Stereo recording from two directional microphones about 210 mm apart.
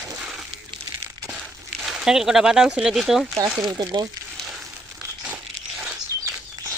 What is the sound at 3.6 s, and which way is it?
Speech, 20° right (ahead or behind).